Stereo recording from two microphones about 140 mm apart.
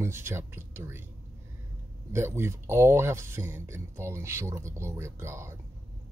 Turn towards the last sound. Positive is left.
turn(degrees=-20)  # may be behind; listen again after turning